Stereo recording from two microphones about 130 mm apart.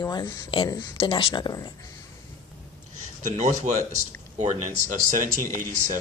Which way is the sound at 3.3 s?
65° right (ahead or behind).